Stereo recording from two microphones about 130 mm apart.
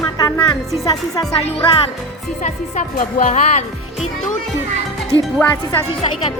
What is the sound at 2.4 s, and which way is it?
Speech, 70° left (ahead or behind).